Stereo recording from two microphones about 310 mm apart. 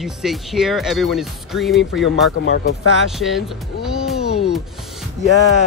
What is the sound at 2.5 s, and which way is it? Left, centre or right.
Speech, left.